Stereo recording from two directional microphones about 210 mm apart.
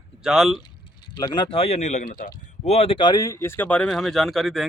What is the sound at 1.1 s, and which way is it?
Speech, 20° left (ahead or behind).